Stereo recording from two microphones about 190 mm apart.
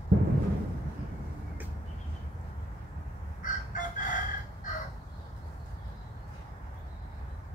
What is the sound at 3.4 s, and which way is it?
Crowing, 45° left (ahead or behind).